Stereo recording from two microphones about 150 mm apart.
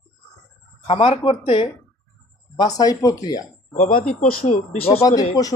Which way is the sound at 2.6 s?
25° left (ahead or behind).